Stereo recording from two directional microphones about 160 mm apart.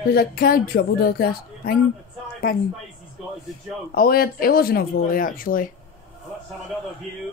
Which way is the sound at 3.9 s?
70° left (ahead or behind).